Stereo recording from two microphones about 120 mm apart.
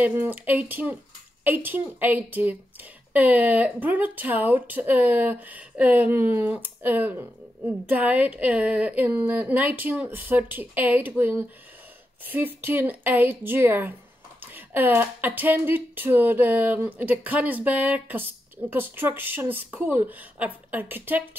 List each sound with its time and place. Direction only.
0.0 s speech: 15° right (ahead or behind)